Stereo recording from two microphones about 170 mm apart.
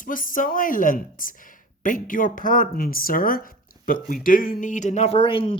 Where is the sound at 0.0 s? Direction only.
55° left (ahead or behind).